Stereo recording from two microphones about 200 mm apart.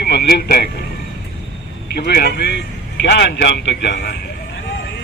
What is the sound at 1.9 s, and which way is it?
A man's voice, 55° left (ahead or behind).